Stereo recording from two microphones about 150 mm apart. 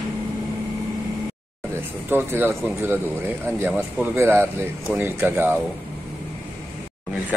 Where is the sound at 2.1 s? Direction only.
15° right (ahead or behind).